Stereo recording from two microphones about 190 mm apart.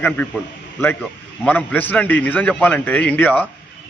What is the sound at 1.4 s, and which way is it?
A man's voice, 10° left (ahead or behind).